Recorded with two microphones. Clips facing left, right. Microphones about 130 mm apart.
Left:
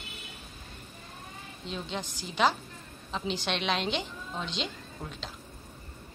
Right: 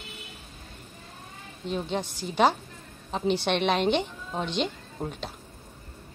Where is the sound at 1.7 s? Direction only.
50° right (ahead or behind).